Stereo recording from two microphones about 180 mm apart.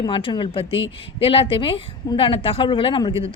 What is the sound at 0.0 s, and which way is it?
A woman's voice, 30° left (ahead or behind).